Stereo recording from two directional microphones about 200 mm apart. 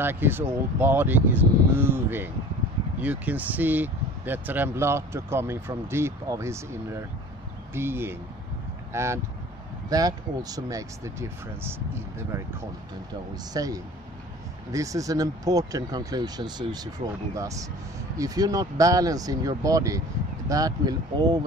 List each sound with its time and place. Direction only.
0.0 s speech: 10° right (ahead or behind)
13.5 s speech: 20° right (ahead or behind)